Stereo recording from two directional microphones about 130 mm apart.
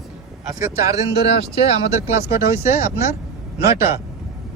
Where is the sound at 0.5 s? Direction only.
25° right (ahead or behind).